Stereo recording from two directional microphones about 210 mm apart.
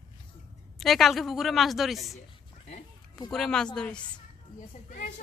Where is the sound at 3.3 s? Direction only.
5° left (ahead or behind).